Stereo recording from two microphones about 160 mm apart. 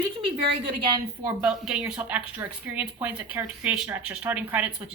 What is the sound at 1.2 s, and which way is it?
Speech, 5° right (ahead or behind).